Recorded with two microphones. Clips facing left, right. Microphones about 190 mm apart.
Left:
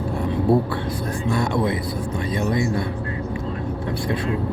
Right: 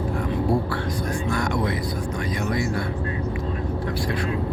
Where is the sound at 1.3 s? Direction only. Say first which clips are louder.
Left 5 dB; 25° left (ahead or behind).